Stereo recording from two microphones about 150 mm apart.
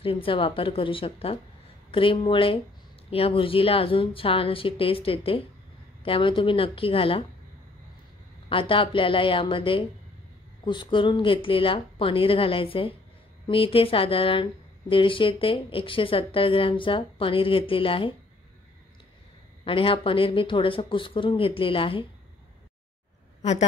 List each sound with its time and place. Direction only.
0.0 s speech: 35° left (ahead or behind)
8.5 s speech: 35° left (ahead or behind)
19.6 s speech: 35° left (ahead or behind)